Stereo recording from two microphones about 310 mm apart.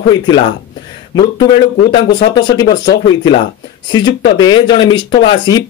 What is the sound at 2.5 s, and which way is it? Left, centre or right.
Speech, centre.